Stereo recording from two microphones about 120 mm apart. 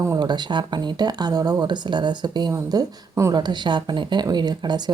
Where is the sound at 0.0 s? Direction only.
30° right (ahead or behind).